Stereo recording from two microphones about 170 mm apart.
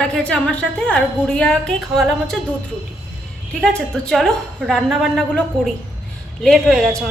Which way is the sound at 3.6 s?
5° left (ahead or behind).